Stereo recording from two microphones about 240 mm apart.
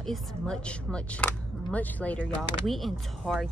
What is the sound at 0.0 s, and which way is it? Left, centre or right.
Speech, centre.